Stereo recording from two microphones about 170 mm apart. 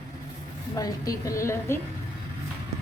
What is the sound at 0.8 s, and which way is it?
A woman's voice, 20° left (ahead or behind).